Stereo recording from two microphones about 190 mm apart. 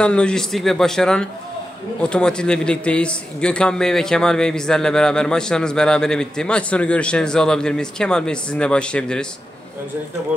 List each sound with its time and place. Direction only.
0.0 s a man's voice: 5° left (ahead or behind)